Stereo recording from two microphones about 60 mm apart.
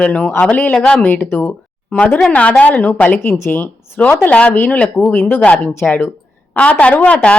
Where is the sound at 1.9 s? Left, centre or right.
Left.